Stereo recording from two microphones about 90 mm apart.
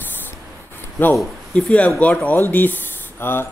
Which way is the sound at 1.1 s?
5° left (ahead or behind).